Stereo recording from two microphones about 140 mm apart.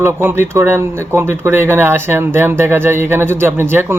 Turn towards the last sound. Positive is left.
turn(degrees=-15)  # may be behind; listen again after turning